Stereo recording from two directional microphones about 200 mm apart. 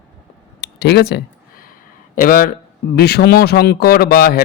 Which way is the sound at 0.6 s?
55° left (ahead or behind).